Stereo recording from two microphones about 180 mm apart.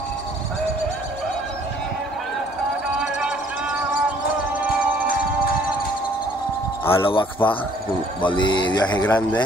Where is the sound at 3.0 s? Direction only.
5° right (ahead or behind).